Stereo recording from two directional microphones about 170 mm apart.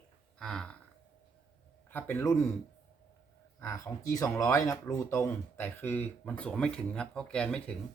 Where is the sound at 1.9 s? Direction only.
10° left (ahead or behind).